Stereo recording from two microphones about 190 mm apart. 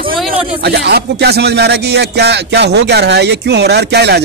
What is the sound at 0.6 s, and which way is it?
Speech, 60° right (ahead or behind).